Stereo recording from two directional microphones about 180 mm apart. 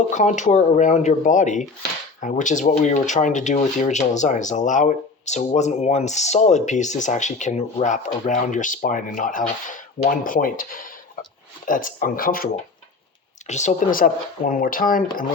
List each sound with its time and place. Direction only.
0.1 s speech: 40° left (ahead or behind)
13.5 s speech: 40° left (ahead or behind)